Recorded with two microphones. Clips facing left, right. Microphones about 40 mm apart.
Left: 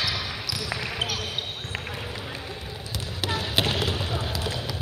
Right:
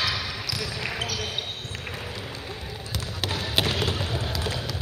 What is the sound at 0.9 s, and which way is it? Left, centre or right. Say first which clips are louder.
Basketball bounce: left 2 dB; left.